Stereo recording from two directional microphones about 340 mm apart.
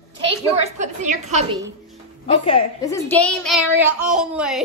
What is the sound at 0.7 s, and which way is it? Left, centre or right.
Speech, right.